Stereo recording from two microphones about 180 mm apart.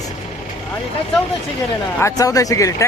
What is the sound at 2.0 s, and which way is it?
Speech, 15° left (ahead or behind).